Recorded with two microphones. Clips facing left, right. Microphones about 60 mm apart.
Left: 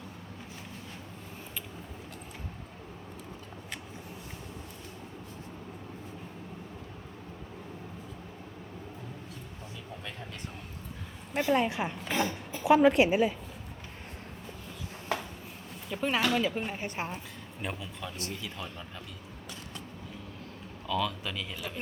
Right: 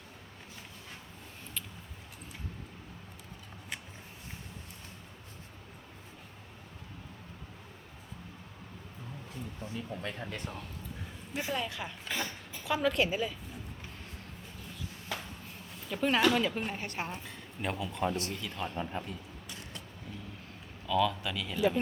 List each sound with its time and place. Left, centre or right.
9.7 s speech: right
11.3 s a woman's voice: left
15.9 s a woman's voice: centre
17.6 s speech: centre
18.6 s speech: right
20.8 s speech: centre